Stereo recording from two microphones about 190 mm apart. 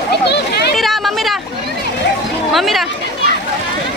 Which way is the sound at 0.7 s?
Centre (ahead or behind).